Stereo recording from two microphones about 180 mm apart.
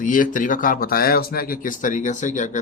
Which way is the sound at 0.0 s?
45° left (ahead or behind).